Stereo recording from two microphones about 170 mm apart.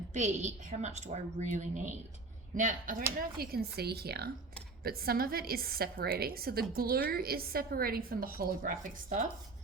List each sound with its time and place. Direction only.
0.1 s a woman's voice: 45° right (ahead or behind)
3.2 s a woman's voice: 65° right (ahead or behind)